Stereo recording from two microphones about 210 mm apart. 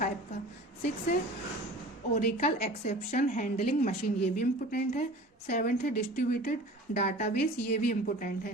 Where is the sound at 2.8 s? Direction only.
35° left (ahead or behind).